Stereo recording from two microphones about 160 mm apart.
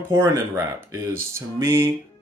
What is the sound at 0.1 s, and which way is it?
Speech, 15° right (ahead or behind).